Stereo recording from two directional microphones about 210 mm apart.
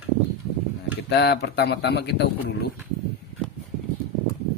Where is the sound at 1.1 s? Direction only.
50° left (ahead or behind).